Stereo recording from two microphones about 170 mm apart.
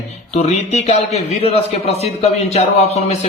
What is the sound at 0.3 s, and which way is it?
A man's voice, 40° left (ahead or behind).